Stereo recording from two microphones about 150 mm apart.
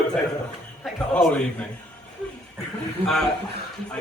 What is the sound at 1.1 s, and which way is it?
Speech, 10° left (ahead or behind).